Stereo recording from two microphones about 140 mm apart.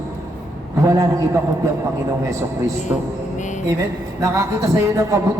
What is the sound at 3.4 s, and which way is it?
Music, 60° left (ahead or behind).